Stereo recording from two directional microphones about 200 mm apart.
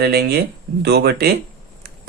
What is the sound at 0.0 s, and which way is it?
Speech, 50° right (ahead or behind).